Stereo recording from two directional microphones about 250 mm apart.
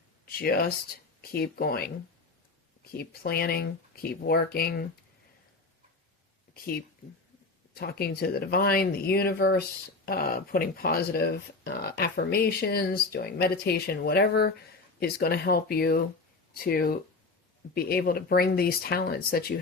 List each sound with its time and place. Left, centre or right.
0.3 s speech: left
2.9 s speech: left
7.8 s speech: left